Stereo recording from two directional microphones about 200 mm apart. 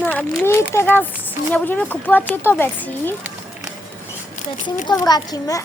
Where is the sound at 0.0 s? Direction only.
5° left (ahead or behind).